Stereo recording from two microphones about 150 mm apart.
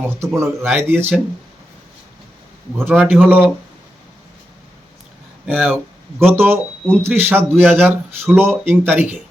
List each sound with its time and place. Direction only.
0.2 s speech: 20° right (ahead or behind)
2.7 s speech: 10° right (ahead or behind)
5.5 s speech: 10° right (ahead or behind)